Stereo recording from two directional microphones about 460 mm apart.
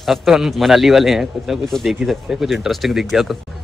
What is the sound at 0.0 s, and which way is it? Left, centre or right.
A man's voice, centre.